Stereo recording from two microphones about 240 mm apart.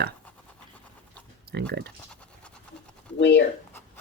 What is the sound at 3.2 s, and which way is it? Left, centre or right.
Speech, left.